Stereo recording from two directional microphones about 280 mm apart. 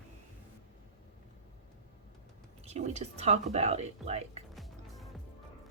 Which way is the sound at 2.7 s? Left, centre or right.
Right.